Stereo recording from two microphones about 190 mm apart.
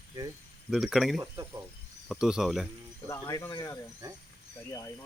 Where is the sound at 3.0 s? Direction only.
15° left (ahead or behind).